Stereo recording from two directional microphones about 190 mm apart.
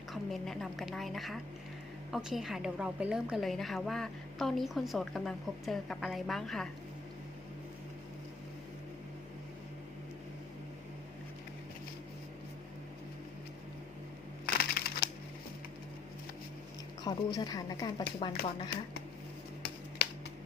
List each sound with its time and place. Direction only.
0.1 s a woman's voice: centre (ahead or behind)
14.4 s crushing: 55° left (ahead or behind)
17.0 s speech: 20° left (ahead or behind)